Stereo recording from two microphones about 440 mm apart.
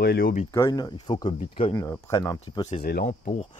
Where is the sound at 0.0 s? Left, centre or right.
Left.